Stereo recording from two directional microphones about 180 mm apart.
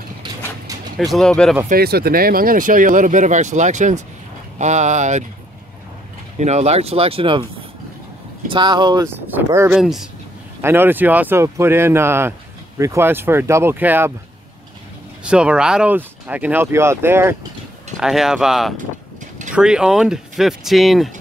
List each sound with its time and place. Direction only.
0.9 s speech: centre (ahead or behind)
1.7 s speech: 60° right (ahead or behind); by 5.2 s 40° right (ahead or behind)
6.3 s speech: 40° right (ahead or behind)
8.5 s speech: 25° right (ahead or behind)
9.8 s speech: centre (ahead or behind)
15.2 s speech: 5° right (ahead or behind)
17.9 s speech: centre (ahead or behind)